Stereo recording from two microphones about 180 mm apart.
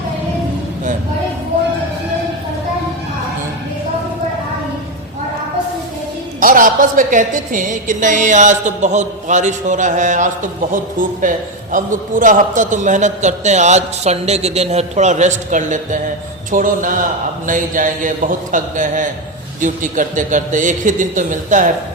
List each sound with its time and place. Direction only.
6.4 s a woman's voice: 50° right (ahead or behind)